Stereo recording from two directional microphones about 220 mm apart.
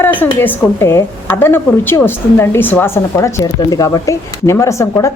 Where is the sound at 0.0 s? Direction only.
10° left (ahead or behind).